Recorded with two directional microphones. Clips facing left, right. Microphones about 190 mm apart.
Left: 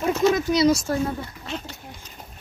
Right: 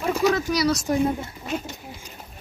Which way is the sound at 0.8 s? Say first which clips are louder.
Right 3 dB; 15° right (ahead or behind).